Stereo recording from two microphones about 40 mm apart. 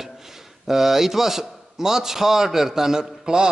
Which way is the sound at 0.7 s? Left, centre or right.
Centre.